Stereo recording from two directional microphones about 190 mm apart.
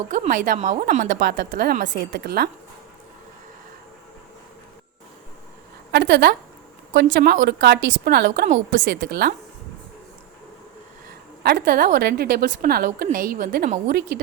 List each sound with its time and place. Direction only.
0.1 s a woman's voice: 40° right (ahead or behind)
5.9 s speech: 65° right (ahead or behind)
8.0 s a woman's voice: 55° right (ahead or behind)
11.4 s a woman's voice: 55° right (ahead or behind)